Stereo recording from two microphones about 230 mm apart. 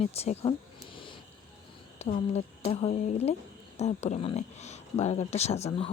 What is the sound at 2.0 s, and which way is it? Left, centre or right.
Speech, left.